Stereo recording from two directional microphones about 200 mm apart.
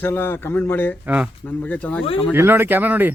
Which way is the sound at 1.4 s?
10° left (ahead or behind).